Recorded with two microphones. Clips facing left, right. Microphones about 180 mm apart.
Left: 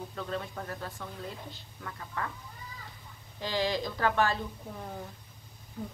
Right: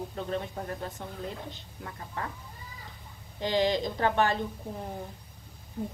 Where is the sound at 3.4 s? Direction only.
20° right (ahead or behind).